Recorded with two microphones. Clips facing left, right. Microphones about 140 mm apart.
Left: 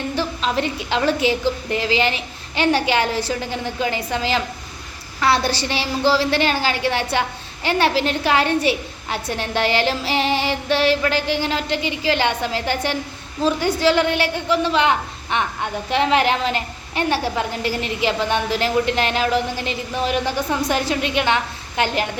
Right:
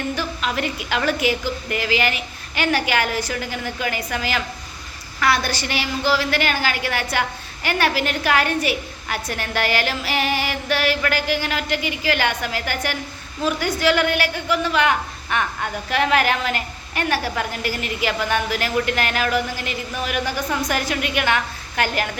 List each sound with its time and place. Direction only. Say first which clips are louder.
0.2 s a woman's voice: left 3 dB; 30° left (ahead or behind)